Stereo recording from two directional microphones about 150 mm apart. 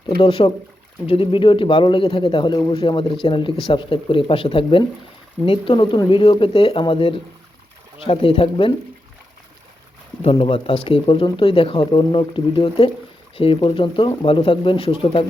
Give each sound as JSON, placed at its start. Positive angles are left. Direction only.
{"t": 0.2, "sound": "speech", "side_deg": 35}
{"t": 10.2, "sound": "speech", "side_deg": 35}